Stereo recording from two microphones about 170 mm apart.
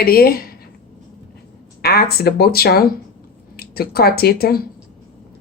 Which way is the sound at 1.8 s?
65° left (ahead or behind).